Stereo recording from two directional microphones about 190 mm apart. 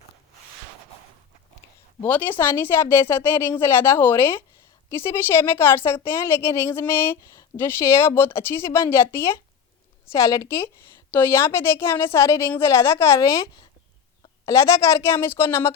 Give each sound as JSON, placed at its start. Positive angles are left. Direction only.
{"t": 2.0, "sound": "a woman's voice", "side_deg": 10}